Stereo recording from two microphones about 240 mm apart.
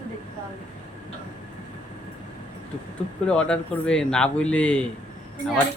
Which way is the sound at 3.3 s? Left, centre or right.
Centre.